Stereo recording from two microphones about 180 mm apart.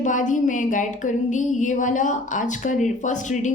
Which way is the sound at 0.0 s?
45° left (ahead or behind).